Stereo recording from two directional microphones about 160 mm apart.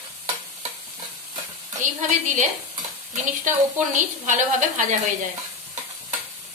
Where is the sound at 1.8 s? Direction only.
50° right (ahead or behind).